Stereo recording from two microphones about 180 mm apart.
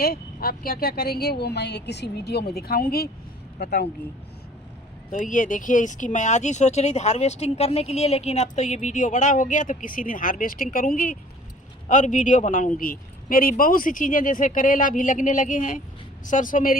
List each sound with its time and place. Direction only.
0.0 s speech: 55° left (ahead or behind)
5.1 s speech: 45° left (ahead or behind)